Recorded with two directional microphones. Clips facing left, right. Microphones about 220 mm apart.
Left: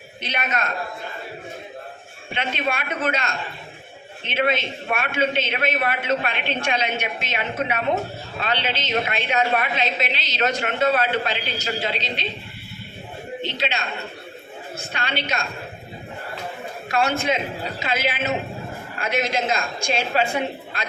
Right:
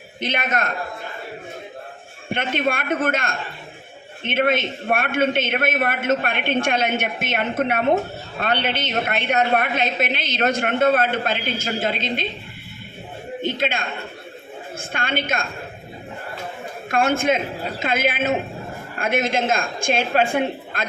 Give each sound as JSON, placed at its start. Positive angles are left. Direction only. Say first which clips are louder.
{"t": 0.3, "sound": "a woman's voice", "louder": "right 3 dB", "side_deg": -50}
{"t": 2.3, "sound": "a woman's voice", "louder": "right 4 dB", "side_deg": -50}
{"t": 13.4, "sound": "a woman's voice", "louder": "right 4 dB", "side_deg": -50}
{"t": 16.9, "sound": "a woman's voice", "louder": "right 3 dB", "side_deg": -50}